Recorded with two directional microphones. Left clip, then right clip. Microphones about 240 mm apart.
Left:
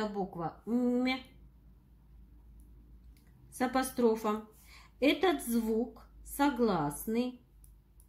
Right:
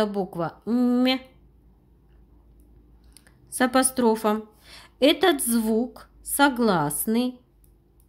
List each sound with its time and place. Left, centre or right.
0.0 s speech: right
3.2 s a sound: right
3.9 s a woman's voice: right